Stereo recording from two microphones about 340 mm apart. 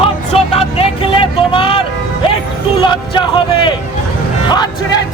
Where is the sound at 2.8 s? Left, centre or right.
Centre.